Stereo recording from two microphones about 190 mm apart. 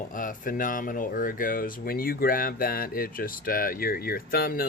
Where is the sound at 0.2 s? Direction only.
45° left (ahead or behind).